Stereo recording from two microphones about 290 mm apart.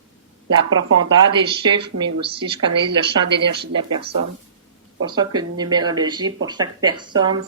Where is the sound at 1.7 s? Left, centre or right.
Centre.